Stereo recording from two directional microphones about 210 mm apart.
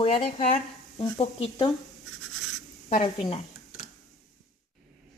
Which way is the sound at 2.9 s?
30° left (ahead or behind).